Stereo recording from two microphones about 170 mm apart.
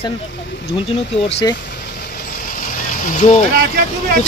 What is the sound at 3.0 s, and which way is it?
Speech, 45° left (ahead or behind).